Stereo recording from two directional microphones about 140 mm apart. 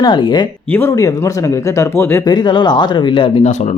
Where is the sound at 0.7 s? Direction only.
20° left (ahead or behind).